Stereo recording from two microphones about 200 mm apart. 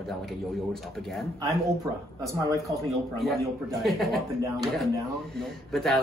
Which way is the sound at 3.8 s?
Centre (ahead or behind).